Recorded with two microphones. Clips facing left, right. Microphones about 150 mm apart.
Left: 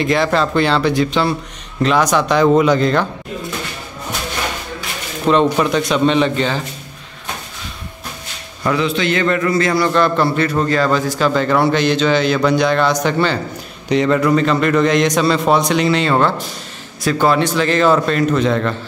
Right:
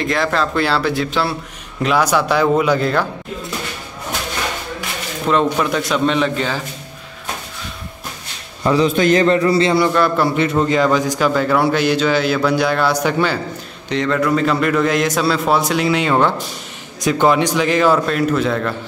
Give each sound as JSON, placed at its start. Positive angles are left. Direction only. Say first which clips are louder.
{"t": 0.0, "sound": "a man's voice", "louder": "left 3 dB", "side_deg": 0}
{"t": 5.2, "sound": "a man's voice", "louder": "left 3 dB", "side_deg": 0}
{"t": 8.7, "sound": "a man's voice", "louder": "right 5 dB", "side_deg": -45}
{"t": 9.8, "sound": "a man's voice", "louder": "left 1 dB", "side_deg": -5}
{"t": 10.3, "sound": "a man's voice", "louder": "right 1 dB", "side_deg": -20}
{"t": 13.8, "sound": "a man's voice", "louder": "left 3 dB", "side_deg": 10}
{"t": 14.3, "sound": "a man's voice", "louder": "left 2 dB", "side_deg": -5}